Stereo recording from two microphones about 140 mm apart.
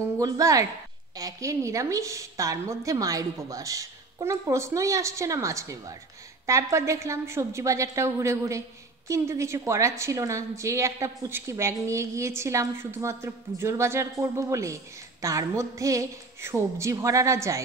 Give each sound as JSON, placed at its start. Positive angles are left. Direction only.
{"t": 0.2, "sound": "a woman's voice", "side_deg": -25}